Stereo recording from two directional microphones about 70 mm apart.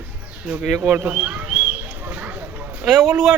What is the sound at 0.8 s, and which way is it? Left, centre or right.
Speech, centre.